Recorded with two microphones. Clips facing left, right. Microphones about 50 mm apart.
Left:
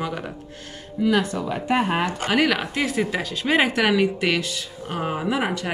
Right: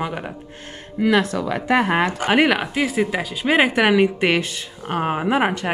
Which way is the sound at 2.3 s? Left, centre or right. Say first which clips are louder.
Right 4 dB; right.